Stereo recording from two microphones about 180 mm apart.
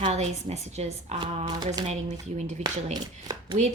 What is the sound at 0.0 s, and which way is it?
A woman's voice, 35° right (ahead or behind).